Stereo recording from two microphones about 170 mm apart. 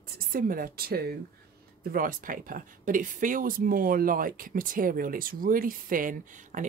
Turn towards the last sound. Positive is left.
turn(degrees=-50)  # may be behind; listen again after turning